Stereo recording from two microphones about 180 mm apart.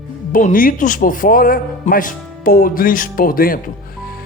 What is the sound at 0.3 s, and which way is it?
A man's voice, 50° left (ahead or behind).